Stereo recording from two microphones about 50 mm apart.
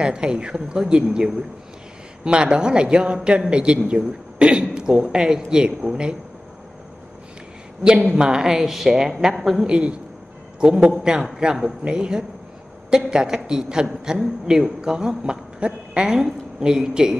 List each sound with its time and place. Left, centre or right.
0.0 s a woman's voice: centre
8.1 s a woman's voice: centre
9.7 s a woman's voice: right
10.9 s a woman's voice: centre